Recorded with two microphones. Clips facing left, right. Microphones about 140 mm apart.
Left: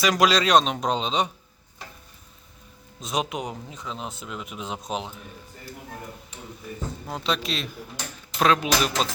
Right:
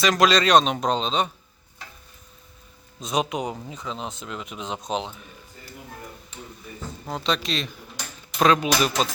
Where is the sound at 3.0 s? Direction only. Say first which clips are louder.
Right 3 dB; centre (ahead or behind).